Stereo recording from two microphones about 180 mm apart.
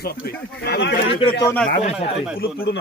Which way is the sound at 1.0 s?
30° left (ahead or behind).